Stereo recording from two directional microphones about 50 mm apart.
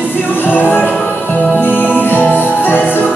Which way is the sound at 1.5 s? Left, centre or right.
Left.